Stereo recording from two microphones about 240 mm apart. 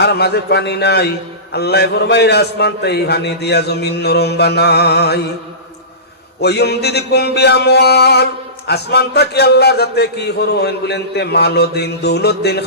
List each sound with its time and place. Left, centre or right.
0.0 s mantra: left
6.4 s mantra: left